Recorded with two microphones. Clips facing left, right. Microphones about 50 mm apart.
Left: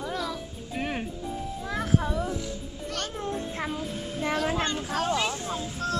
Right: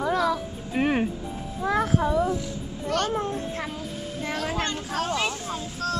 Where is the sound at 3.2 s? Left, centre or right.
Centre.